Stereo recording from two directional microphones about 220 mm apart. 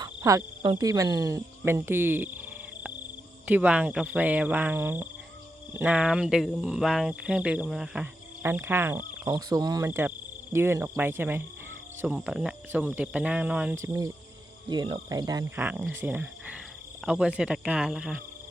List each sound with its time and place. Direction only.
0.0 s cricket: 15° right (ahead or behind)
3.4 s speech: 5° right (ahead or behind)